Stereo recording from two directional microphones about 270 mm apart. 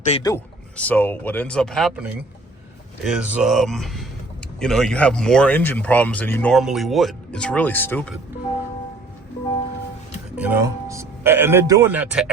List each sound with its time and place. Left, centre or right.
0.0 s speech: centre
10.3 s speech: centre